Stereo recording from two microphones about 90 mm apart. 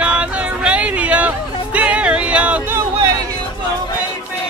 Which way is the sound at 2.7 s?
35° right (ahead or behind).